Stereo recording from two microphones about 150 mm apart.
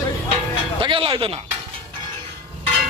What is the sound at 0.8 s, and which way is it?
Speech, 35° right (ahead or behind).